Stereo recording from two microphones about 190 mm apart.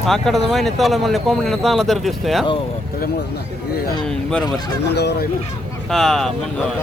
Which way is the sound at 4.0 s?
5° left (ahead or behind).